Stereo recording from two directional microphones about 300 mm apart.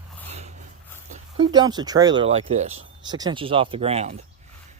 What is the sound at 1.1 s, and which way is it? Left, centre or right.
Speech, centre.